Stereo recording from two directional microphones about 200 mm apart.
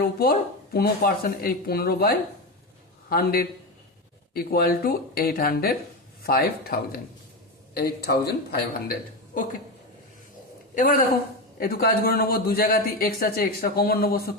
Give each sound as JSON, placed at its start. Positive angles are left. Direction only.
{"t": 0.0, "sound": "a man's voice", "side_deg": 50}
{"t": 10.8, "sound": "a man's voice", "side_deg": 45}